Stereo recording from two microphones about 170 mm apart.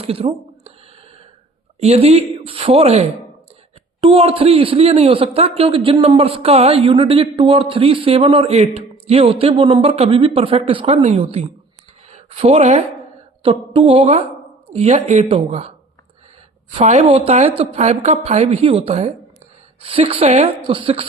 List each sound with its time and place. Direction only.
0.0 s speech: 35° right (ahead or behind)
1.8 s speech: 35° right (ahead or behind)